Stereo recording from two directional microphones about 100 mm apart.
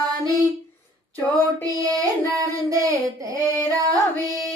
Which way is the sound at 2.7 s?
35° right (ahead or behind).